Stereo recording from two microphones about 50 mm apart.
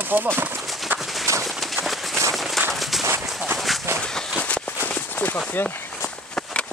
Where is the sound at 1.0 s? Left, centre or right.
Centre.